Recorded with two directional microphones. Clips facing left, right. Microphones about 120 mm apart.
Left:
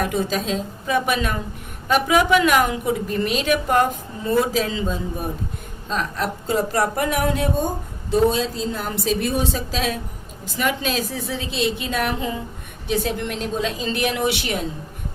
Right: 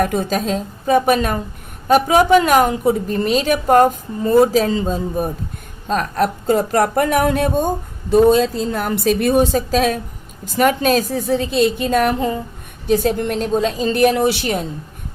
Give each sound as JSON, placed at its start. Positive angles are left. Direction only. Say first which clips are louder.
{"t": 0.0, "sound": "a woman's voice", "louder": "right 4 dB", "side_deg": -50}